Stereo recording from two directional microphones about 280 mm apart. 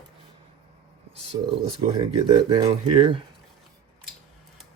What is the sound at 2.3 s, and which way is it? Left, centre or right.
Speech, centre.